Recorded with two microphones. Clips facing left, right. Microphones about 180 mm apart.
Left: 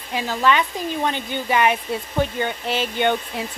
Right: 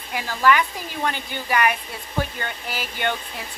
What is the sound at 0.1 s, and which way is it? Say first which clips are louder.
A woman's voice: even; 20° left (ahead or behind).